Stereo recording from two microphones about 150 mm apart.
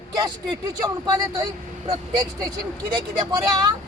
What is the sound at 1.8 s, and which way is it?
Speech, 40° right (ahead or behind).